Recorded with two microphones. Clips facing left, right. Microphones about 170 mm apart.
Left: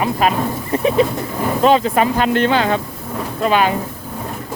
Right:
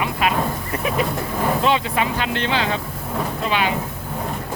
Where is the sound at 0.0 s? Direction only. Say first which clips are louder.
Left 4 dB; 40° left (ahead or behind).